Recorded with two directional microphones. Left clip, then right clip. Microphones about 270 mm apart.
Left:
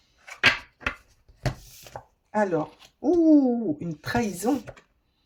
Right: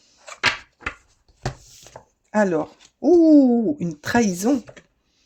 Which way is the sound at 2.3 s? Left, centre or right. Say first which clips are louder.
Right 4 dB; right.